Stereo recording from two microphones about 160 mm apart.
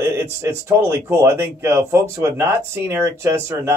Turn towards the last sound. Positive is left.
turn(degrees=-15)  # may be behind; listen again after turning